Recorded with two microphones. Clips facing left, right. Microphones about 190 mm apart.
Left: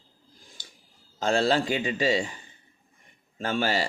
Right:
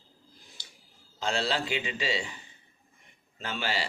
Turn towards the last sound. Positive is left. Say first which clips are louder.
# left 7 dB
turn(degrees=45)  # may be behind; listen again after turning